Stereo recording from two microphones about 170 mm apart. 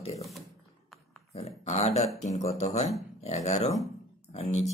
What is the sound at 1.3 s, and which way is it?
Speech, 35° left (ahead or behind).